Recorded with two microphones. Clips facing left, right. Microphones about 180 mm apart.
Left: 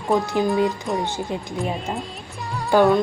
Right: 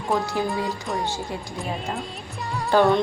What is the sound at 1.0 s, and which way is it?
Speech, 20° left (ahead or behind).